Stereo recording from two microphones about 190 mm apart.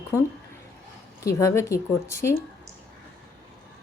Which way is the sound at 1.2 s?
15° left (ahead or behind).